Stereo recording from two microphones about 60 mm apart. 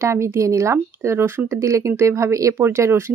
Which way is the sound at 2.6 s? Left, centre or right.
Right.